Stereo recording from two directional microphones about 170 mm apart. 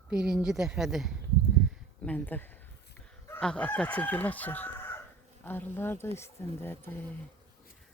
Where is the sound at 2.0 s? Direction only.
10° left (ahead or behind).